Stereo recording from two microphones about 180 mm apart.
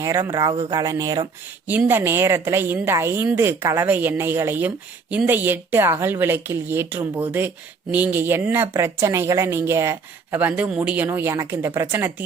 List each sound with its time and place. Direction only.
0.0 s speech: 15° right (ahead or behind)